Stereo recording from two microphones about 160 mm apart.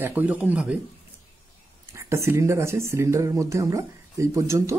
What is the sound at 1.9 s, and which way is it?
Speech, 15° right (ahead or behind).